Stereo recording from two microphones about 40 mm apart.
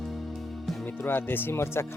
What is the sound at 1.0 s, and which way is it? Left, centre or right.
Speech, left.